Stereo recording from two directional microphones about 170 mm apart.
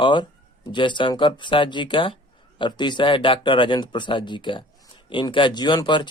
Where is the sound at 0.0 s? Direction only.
30° left (ahead or behind).